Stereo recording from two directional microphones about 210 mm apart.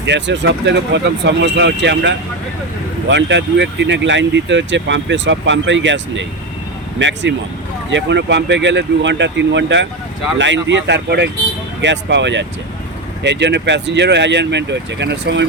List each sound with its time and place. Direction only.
0.0 s speech: 55° right (ahead or behind)